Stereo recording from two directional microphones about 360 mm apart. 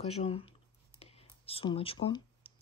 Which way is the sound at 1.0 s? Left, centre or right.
Centre.